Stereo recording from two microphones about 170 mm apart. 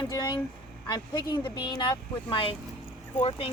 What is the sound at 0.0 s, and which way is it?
Speech, 25° left (ahead or behind).